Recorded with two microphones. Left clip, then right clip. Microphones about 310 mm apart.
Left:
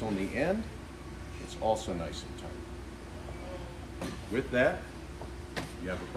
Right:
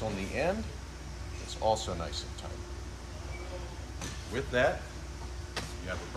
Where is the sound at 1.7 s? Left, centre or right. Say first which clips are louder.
Even; centre.